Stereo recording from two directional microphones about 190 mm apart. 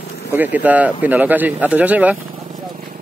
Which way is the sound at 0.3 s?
10° right (ahead or behind).